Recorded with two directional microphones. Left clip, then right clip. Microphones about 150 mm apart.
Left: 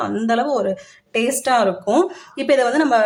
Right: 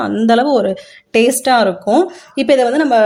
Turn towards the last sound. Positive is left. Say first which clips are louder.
# right 4 dB
turn(degrees=-25)  # may be behind; listen again after turning